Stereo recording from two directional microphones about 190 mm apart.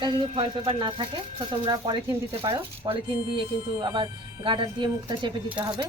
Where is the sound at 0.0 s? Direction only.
25° right (ahead or behind).